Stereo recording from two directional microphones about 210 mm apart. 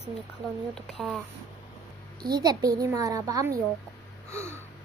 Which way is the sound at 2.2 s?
20° right (ahead or behind).